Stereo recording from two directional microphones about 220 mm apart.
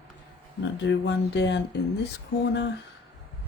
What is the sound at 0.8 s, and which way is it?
Speech, 55° left (ahead or behind).